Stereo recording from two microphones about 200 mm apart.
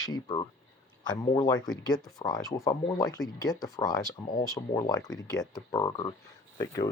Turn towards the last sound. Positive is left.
turn(degrees=15)  # may be behind; listen again after turning